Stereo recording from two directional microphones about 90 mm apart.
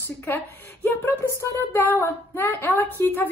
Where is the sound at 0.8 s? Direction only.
25° left (ahead or behind).